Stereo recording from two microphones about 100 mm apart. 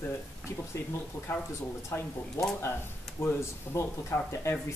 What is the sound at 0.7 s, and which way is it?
Speech, 25° left (ahead or behind).